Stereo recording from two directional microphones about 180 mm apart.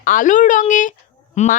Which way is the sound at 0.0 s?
45° left (ahead or behind).